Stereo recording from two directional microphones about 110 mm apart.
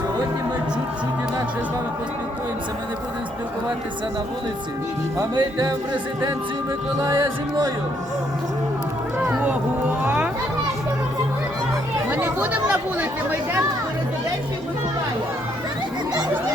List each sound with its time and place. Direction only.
5.1 s speech: 40° right (ahead or behind)
9.2 s a sound: 10° right (ahead or behind)
12.1 s chatter: 15° right (ahead or behind)